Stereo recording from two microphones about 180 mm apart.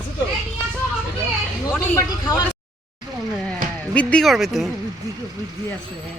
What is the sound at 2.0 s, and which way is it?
Speech, 20° left (ahead or behind).